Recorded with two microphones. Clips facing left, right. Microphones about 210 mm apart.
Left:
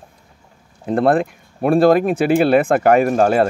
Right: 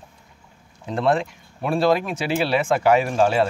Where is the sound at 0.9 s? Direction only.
55° left (ahead or behind).